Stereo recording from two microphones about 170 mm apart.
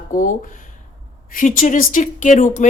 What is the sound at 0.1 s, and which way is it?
Speech, 50° left (ahead or behind).